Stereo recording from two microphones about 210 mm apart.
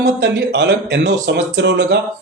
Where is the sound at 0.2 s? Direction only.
55° right (ahead or behind).